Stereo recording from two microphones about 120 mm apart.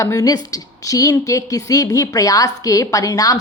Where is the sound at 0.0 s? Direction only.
30° left (ahead or behind).